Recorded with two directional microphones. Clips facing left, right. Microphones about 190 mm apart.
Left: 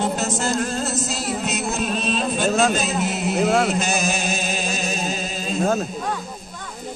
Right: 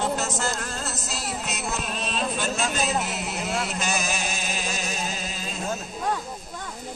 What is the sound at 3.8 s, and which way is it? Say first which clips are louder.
Chant: left 5 dB; 25° left (ahead or behind).